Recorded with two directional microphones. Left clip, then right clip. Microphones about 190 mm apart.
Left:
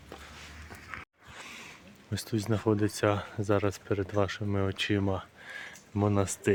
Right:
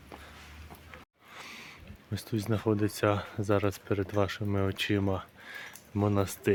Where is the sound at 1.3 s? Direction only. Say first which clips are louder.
Even; 10° left (ahead or behind).